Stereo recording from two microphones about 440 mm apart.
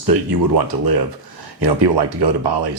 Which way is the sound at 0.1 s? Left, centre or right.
Right.